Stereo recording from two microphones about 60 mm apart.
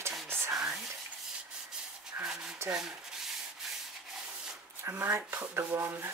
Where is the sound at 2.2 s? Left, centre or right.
Right.